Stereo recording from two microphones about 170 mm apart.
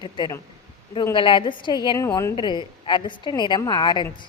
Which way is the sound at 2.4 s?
25° left (ahead or behind).